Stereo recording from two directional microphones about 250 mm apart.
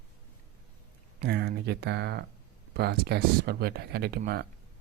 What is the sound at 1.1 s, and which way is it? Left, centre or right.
Speech, right.